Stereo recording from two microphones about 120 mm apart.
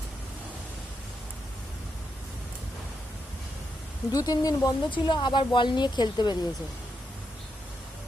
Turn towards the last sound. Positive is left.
turn(degrees=35)  # may be behind; listen again after turning